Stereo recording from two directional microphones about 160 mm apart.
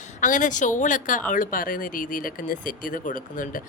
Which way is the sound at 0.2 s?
55° left (ahead or behind).